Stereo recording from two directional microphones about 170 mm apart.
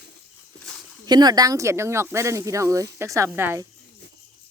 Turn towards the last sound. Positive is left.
turn(degrees=-15)  # may be behind; listen again after turning